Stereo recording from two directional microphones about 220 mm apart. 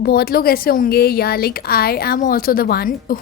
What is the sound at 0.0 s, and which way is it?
A woman's voice, 45° left (ahead or behind).